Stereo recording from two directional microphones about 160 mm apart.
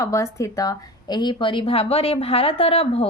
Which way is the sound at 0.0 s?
20° left (ahead or behind).